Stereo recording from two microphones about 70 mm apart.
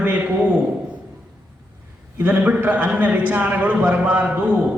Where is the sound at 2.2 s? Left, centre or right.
Right.